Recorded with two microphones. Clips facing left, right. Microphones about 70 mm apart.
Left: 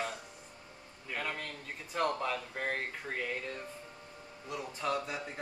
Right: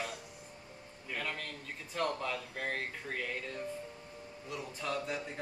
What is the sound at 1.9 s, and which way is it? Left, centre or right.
Speech, centre.